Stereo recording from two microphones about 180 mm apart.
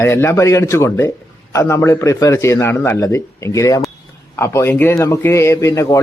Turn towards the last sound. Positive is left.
turn(degrees=15)  # may be behind; listen again after turning